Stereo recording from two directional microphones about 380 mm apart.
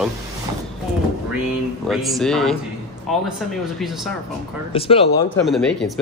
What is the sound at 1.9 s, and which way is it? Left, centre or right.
Speech, centre.